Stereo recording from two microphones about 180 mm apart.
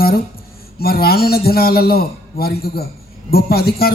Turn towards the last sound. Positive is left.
turn(degrees=60)  # may be behind; listen again after turning